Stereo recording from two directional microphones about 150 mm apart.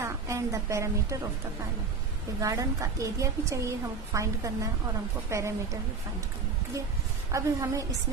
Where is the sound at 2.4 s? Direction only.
20° right (ahead or behind).